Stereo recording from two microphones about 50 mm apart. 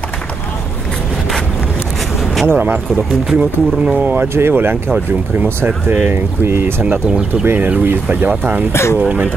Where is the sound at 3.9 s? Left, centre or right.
Right.